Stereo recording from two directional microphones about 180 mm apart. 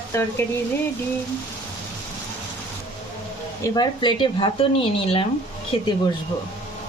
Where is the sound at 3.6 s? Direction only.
25° left (ahead or behind).